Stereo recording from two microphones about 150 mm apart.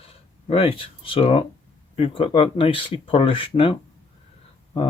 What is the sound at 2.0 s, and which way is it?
Speech, 40° left (ahead or behind).